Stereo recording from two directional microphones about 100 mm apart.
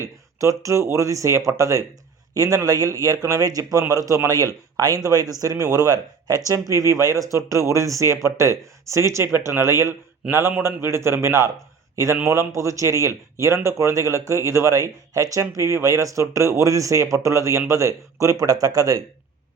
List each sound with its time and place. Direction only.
0.0 s a man's voice: 30° right (ahead or behind)